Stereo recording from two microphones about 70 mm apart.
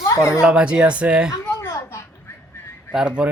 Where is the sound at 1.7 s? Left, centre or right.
Left.